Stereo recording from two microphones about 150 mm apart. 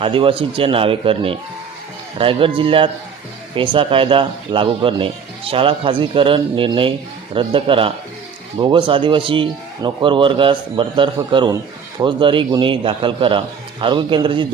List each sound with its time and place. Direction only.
0.0 s a man's voice: 35° right (ahead or behind)